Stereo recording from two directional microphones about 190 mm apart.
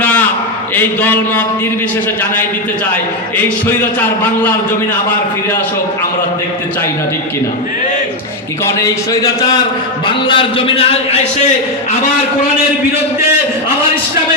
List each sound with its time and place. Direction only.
0.0 s a sound: 10° left (ahead or behind)
0.8 s speech: 10° left (ahead or behind)
2.9 s speech: 10° left (ahead or behind)
8.6 s a man's voice: 15° left (ahead or behind); by 11.2 s 30° left (ahead or behind)